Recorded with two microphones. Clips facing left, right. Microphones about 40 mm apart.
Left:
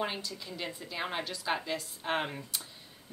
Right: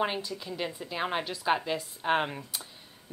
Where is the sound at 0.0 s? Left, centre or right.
Centre.